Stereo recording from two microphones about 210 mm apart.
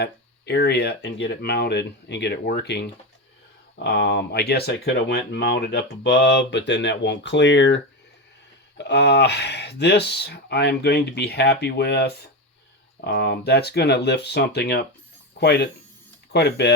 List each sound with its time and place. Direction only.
0.0 s speech: 50° left (ahead or behind)
3.8 s speech: 55° left (ahead or behind)
8.8 s speech: 55° left (ahead or behind)